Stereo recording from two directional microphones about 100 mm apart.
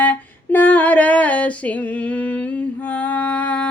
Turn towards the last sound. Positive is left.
turn(degrees=15)  # may be behind; listen again after turning